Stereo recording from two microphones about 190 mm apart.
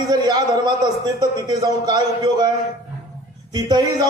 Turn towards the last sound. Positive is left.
turn(degrees=-20)  # may be behind; listen again after turning